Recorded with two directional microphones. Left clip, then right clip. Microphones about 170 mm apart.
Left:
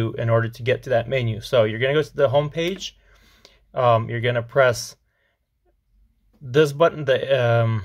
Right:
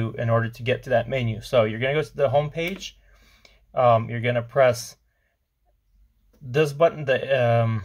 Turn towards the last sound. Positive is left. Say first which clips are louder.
# left 2 dB
turn(degrees=45)  # may be behind; listen again after turning